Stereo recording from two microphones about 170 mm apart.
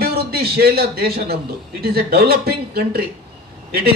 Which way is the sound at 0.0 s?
65° right (ahead or behind).